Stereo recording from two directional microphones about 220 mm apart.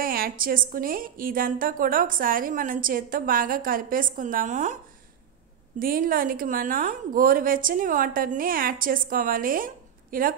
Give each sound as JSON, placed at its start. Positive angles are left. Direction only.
{"t": 0.0, "sound": "a woman's voice", "side_deg": -40}
{"t": 5.8, "sound": "a woman's voice", "side_deg": -40}